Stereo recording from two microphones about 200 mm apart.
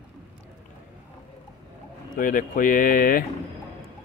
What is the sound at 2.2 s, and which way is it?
Speech, 40° left (ahead or behind).